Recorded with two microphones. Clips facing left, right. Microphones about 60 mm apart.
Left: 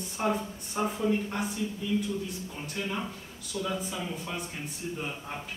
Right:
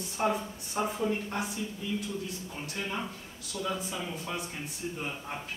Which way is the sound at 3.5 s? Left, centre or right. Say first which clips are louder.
Left 1 dB; centre.